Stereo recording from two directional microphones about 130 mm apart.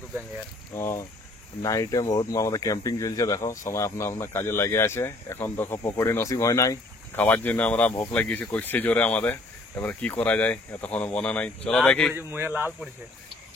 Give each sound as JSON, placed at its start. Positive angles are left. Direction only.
{"t": 0.7, "sound": "speech", "side_deg": 20}
{"t": 7.2, "sound": "speech", "side_deg": 10}
{"t": 12.1, "sound": "a man's voice", "side_deg": -15}